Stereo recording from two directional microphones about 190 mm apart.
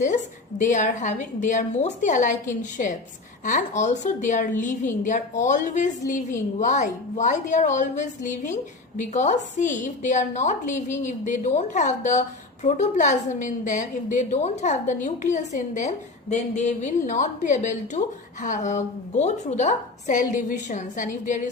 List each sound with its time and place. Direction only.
0.6 s a woman's voice: 40° left (ahead or behind)